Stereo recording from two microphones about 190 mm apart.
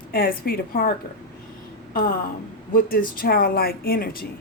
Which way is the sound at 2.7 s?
50° left (ahead or behind).